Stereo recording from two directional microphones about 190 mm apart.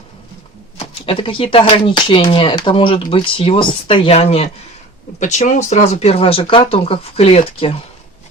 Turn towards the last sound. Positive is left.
turn(degrees=30)  # may be behind; listen again after turning